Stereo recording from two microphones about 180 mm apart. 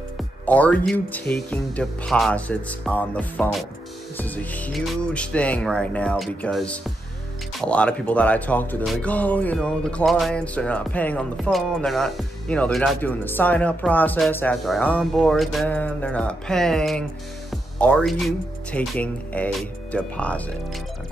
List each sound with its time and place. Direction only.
0.2 s speech: 5° left (ahead or behind)